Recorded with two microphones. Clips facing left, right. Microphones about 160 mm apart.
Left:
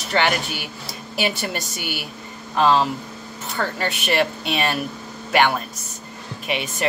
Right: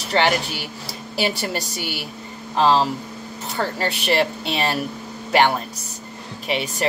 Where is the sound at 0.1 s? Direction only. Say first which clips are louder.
Right 2 dB; 35° right (ahead or behind).